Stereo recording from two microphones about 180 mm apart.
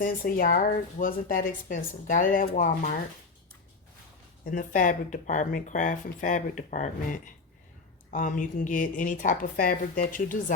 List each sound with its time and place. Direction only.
0.0 s speech: 50° left (ahead or behind)
4.5 s speech: 45° left (ahead or behind)